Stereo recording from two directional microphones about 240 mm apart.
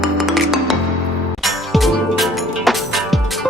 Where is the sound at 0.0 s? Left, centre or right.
Centre.